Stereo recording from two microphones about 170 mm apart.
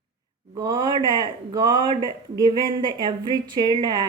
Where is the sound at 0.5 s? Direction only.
20° right (ahead or behind).